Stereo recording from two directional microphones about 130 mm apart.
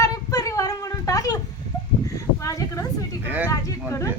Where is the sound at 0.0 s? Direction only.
25° left (ahead or behind).